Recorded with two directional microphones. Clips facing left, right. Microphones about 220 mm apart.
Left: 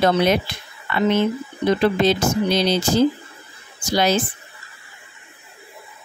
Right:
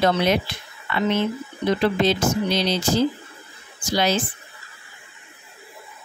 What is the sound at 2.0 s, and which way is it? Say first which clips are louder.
Speech: left 2 dB; 45° left (ahead or behind).